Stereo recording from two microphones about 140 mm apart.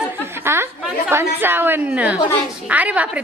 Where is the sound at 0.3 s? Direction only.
15° right (ahead or behind).